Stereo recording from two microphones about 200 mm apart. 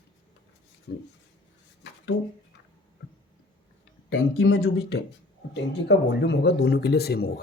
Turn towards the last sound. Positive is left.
turn(degrees=55)  # may be behind; listen again after turning